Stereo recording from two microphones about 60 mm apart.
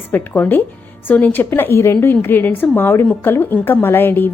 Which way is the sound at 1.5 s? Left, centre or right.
Left.